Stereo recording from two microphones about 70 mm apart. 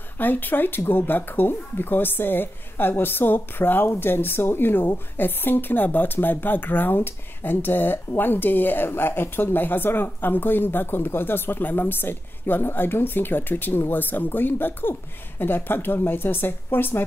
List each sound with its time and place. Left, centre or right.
0.2 s speech: left